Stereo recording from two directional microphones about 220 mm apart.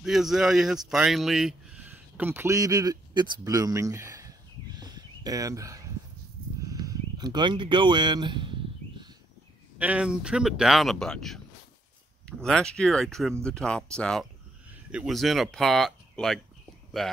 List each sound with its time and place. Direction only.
0.0 s speech: centre (ahead or behind)
6.7 s a sound: 15° right (ahead or behind)
9.8 s speech: 5° right (ahead or behind)